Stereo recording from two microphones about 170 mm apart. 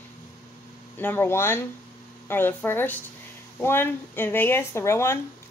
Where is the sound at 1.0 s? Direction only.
15° left (ahead or behind).